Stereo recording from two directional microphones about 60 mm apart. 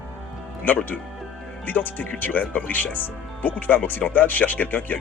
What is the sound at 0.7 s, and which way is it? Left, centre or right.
Speech, left.